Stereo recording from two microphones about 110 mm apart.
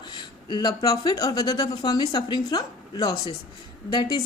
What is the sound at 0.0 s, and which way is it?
Speech, 40° left (ahead or behind).